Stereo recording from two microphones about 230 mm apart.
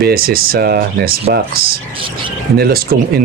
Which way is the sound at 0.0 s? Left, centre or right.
Right.